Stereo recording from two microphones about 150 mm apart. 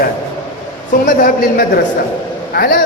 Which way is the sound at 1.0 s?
65° left (ahead or behind).